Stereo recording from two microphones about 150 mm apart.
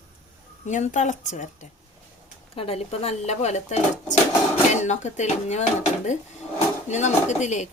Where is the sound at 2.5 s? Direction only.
40° left (ahead or behind).